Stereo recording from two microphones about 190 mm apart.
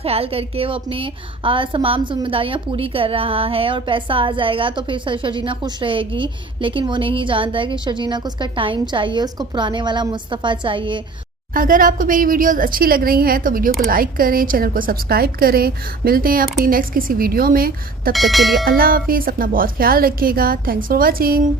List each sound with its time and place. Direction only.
0.0 s a woman's voice: 30° right (ahead or behind)
11.5 s a woman's voice: 45° right (ahead or behind)
18.1 s speech: centre (ahead or behind)
18.8 s a woman's voice: 50° right (ahead or behind)